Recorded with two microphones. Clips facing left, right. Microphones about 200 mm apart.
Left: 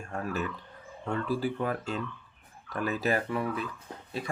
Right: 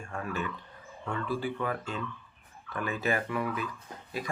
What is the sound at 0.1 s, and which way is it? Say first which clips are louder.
Speech: left 2 dB; 40° left (ahead or behind).